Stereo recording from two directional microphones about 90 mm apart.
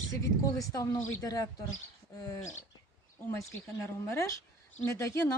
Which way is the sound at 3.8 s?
35° left (ahead or behind).